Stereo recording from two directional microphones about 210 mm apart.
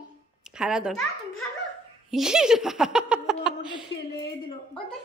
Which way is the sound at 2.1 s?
Centre (ahead or behind).